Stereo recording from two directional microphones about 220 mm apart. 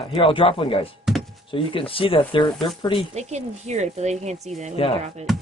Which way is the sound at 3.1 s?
30° right (ahead or behind).